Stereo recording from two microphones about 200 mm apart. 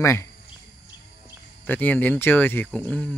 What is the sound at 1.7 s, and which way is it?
Speech, 10° left (ahead or behind).